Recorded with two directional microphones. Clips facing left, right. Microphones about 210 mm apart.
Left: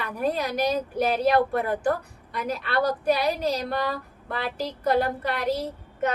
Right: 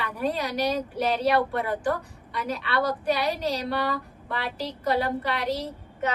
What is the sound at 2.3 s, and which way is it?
A woman's voice, 50° left (ahead or behind).